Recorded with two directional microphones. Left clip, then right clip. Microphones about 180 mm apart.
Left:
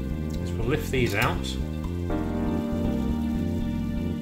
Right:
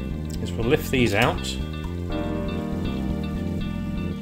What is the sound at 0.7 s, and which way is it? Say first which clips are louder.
Speech: right 5 dB; 60° right (ahead or behind).